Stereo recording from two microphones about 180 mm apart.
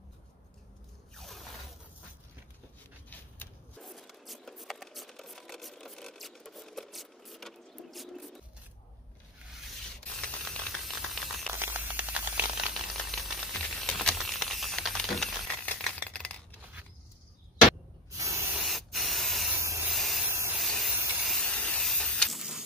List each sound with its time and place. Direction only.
1.1 s zipper: centre (ahead or behind)
3.1 s a sound: 5° left (ahead or behind)
10.0 s a sound: 5° left (ahead or behind)
11.5 s a sound: 10° right (ahead or behind); by 16.3 s 5° left (ahead or behind)
18.1 s spray: 15° right (ahead or behind)
18.6 s spray: centre (ahead or behind)
19.5 s spray: 15° right (ahead or behind)
19.9 s spray: centre (ahead or behind)
20.2 s spray: 15° right (ahead or behind)
20.5 s spray: centre (ahead or behind)
20.9 s steam: 10° right (ahead or behind)
21.3 s hiss: 5° left (ahead or behind)